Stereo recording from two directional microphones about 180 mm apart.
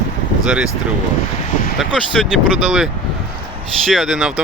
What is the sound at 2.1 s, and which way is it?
Speech, centre (ahead or behind).